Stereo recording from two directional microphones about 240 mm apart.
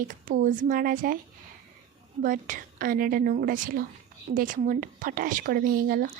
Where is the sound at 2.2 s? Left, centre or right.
Right.